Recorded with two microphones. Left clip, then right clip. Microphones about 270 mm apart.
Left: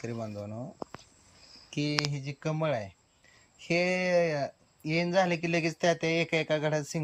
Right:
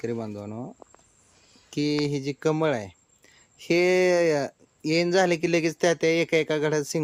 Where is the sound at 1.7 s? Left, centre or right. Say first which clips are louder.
Right 6 dB; centre.